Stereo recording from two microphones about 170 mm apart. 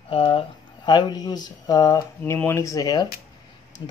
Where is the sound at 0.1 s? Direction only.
30° left (ahead or behind).